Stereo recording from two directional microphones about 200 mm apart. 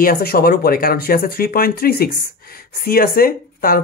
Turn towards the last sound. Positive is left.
turn(degrees=45)  # may be behind; listen again after turning